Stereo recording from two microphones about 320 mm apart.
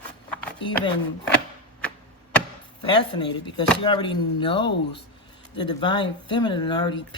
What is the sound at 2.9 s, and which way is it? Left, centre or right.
Speech, centre.